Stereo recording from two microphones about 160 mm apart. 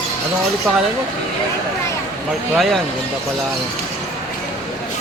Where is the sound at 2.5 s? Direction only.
Centre (ahead or behind).